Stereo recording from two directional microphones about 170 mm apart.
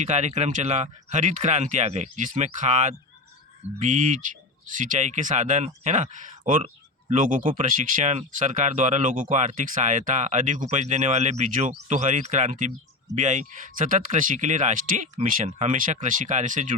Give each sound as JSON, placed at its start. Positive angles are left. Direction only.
{"t": 0.0, "sound": "speech", "side_deg": -40}